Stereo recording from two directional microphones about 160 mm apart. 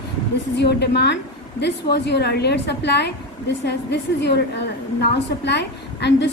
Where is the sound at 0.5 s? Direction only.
90° left.